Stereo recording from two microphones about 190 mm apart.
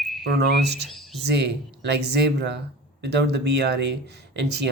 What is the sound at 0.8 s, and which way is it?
Speech, centre (ahead or behind).